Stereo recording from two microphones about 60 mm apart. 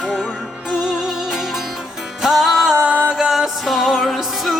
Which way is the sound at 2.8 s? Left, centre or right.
Right.